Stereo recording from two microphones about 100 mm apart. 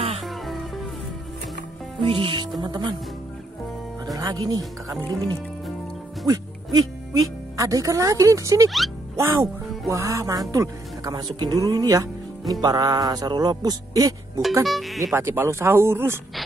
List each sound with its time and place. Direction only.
0.2 s music: centre (ahead or behind)
2.0 s speech: 60° right (ahead or behind)
2.6 s speech: 50° right (ahead or behind)
4.0 s speech: 40° right (ahead or behind)
6.2 s speech: 40° right (ahead or behind)
8.6 s speech: centre (ahead or behind)
9.1 s music: 30° right (ahead or behind)
10.5 s speech: 35° right (ahead or behind)
14.6 s speech: centre (ahead or behind)
15.1 s speech: 25° right (ahead or behind)